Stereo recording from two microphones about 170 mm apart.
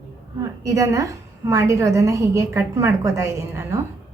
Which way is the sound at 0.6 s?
20° right (ahead or behind).